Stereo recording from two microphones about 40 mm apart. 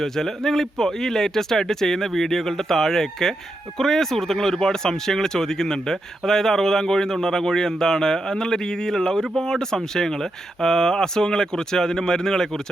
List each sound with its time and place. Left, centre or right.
0.0 s speech: centre